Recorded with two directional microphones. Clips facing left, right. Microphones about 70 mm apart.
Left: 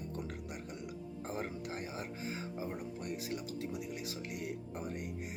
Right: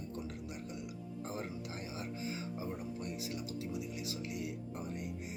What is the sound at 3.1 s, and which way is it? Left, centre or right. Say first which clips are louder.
A man's voice: left 1 dB; left.